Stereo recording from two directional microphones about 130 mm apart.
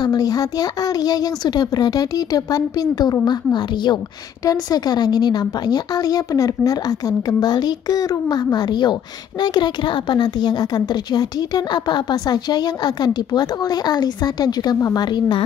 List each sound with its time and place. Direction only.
0.0 s a woman's voice: 30° left (ahead or behind)